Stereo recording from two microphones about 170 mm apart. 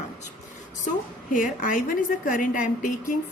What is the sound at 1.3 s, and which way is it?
A woman's voice, 50° left (ahead or behind).